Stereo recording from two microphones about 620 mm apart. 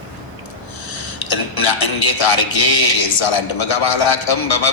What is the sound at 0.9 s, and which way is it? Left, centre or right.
Speech, left.